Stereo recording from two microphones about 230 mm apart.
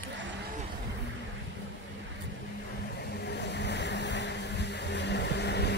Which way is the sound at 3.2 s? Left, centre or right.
Left.